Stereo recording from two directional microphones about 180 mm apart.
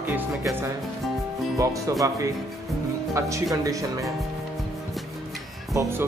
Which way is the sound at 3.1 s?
15° right (ahead or behind).